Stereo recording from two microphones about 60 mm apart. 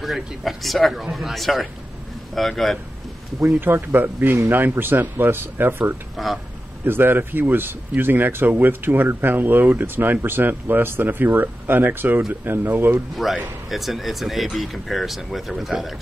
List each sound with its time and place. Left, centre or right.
0.0 s speech: centre
3.5 s speech: right
6.1 s speech: centre
6.8 s speech: right
13.1 s speech: centre